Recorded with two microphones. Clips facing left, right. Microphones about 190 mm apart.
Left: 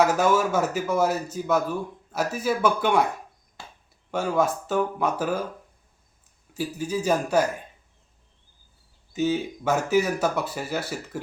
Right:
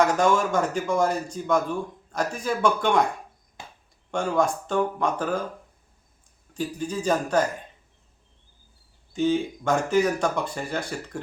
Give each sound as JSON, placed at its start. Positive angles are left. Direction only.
{"t": 0.0, "sound": "a man's voice", "side_deg": 5}
{"t": 3.6, "sound": "a sound", "side_deg": -20}
{"t": 4.1, "sound": "speech", "side_deg": 5}
{"t": 6.5, "sound": "a man's voice", "side_deg": 10}
{"t": 9.1, "sound": "a man's voice", "side_deg": 5}